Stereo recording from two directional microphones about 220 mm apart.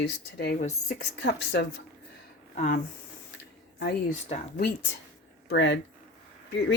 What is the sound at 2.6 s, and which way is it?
Speech, 35° left (ahead or behind).